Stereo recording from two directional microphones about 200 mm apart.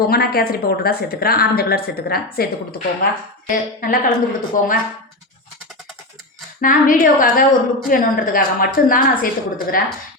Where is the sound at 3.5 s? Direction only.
45° left (ahead or behind).